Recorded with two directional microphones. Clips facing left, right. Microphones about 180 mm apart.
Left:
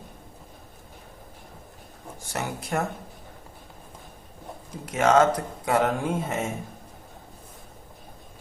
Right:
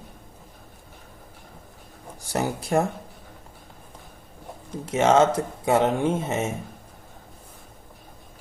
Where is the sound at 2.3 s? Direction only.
35° right (ahead or behind).